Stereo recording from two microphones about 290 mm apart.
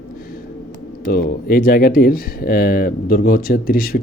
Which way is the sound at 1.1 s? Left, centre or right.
Left.